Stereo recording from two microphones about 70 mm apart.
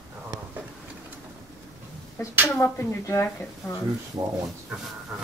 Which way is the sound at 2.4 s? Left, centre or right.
Left.